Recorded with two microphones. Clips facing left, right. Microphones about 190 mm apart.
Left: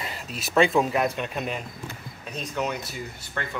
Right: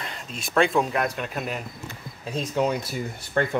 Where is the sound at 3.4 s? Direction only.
45° right (ahead or behind).